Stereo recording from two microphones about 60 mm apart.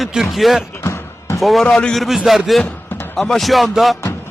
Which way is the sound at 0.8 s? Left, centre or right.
Left.